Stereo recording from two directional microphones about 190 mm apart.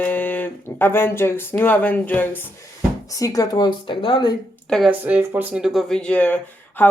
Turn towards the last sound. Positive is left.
turn(degrees=10)  # may be behind; listen again after turning